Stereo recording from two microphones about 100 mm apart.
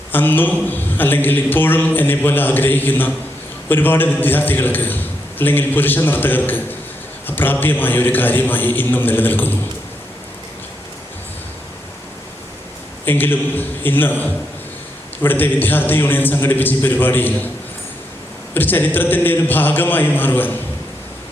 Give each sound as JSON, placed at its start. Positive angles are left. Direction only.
{"t": 0.1, "sound": "a man's voice", "side_deg": 20}
{"t": 13.1, "sound": "a man's voice", "side_deg": 20}
{"t": 18.5, "sound": "a man's voice", "side_deg": 20}